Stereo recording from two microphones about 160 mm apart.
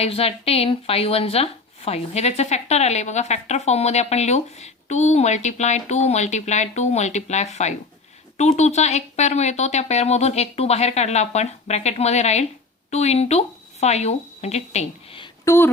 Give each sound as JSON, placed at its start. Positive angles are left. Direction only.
{"t": 0.0, "sound": "speech", "side_deg": 40}
{"t": 15.4, "sound": "speech", "side_deg": 15}